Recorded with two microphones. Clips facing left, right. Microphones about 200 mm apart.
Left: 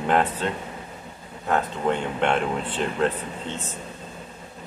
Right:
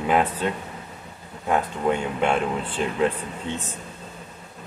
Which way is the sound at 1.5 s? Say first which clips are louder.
Right 1 dB; 10° right (ahead or behind).